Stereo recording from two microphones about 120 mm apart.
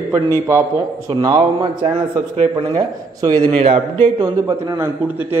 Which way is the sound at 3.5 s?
55° right (ahead or behind).